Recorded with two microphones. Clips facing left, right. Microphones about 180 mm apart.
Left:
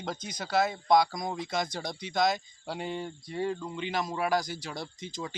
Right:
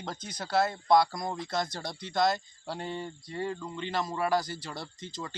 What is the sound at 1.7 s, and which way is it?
Speech, 15° left (ahead or behind).